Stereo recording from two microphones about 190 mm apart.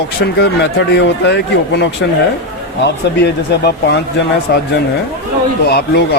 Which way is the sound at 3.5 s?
60° left (ahead or behind).